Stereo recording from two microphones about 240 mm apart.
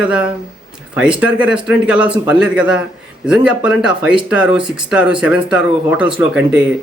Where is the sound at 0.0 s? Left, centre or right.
Centre.